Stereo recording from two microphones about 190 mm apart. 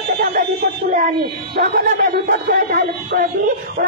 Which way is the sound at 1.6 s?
50° right (ahead or behind).